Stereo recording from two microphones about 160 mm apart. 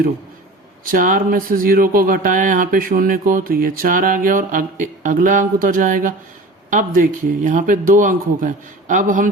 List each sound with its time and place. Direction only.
0.9 s speech: 60° right (ahead or behind)